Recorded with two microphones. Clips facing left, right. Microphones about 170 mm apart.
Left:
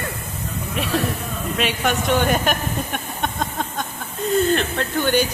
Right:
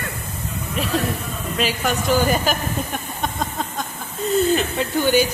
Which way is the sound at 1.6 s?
Centre (ahead or behind).